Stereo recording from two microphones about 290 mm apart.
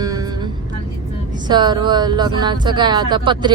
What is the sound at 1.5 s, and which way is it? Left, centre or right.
Speech, centre.